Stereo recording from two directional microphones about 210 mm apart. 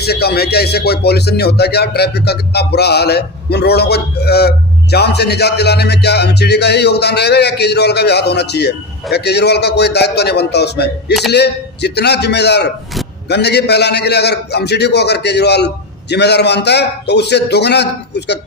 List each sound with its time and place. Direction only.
0.0 s speech: 50° left (ahead or behind)